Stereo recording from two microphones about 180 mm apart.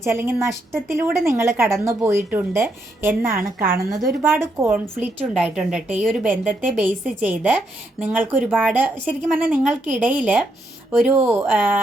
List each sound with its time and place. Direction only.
0.0 s a woman's voice: 15° right (ahead or behind)
3.3 s a woman's voice: 55° right (ahead or behind)
4.3 s a woman's voice: 15° right (ahead or behind)